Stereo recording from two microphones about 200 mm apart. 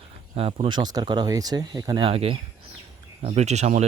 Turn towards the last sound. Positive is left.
turn(degrees=-35)  # may be behind; listen again after turning